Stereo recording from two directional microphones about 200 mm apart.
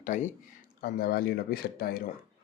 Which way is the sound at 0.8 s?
50° left (ahead or behind).